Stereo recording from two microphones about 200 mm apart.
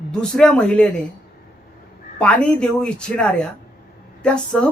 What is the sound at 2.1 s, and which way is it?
Speech, 5° left (ahead or behind).